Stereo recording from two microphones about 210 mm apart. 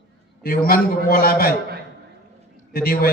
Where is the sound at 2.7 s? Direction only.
45° left (ahead or behind).